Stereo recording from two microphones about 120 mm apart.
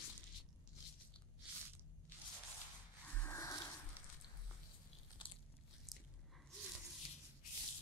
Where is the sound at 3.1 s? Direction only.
20° left (ahead or behind).